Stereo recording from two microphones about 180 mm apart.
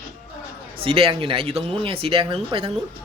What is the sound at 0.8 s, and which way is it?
Speech, 30° right (ahead or behind).